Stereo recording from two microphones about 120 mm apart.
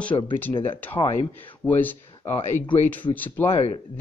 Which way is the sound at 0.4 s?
15° left (ahead or behind).